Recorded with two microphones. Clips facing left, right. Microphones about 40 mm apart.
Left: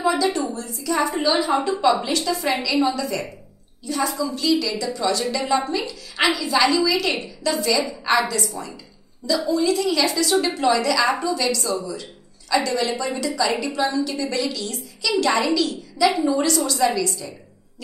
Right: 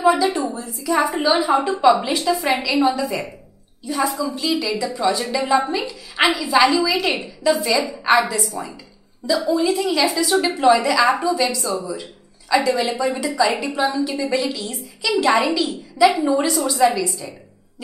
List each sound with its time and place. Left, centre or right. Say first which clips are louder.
0.0 s a woman's voice: right 4 dB; centre
9.5 s a woman's voice: right 1 dB; centre